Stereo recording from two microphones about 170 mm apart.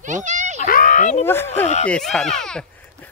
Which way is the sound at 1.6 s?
45° left (ahead or behind).